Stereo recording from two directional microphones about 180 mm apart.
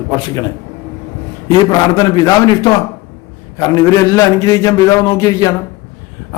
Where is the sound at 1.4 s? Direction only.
20° left (ahead or behind).